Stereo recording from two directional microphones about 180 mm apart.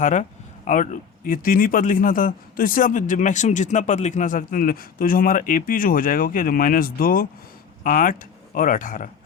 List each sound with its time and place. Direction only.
0.0 s speech: 40° left (ahead or behind)